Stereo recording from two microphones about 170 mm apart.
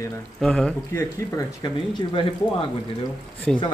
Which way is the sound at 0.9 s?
15° left (ahead or behind).